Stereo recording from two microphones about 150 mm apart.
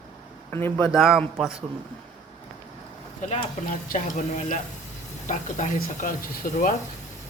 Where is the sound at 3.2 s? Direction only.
55° left (ahead or behind).